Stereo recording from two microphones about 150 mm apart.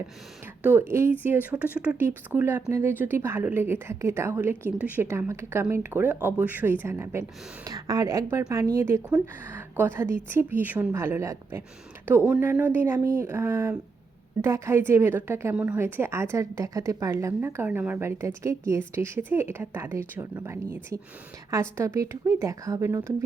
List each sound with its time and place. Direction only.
0.6 s a woman's voice: 15° right (ahead or behind)